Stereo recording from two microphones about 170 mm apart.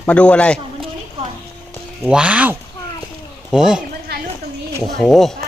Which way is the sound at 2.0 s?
5° right (ahead or behind).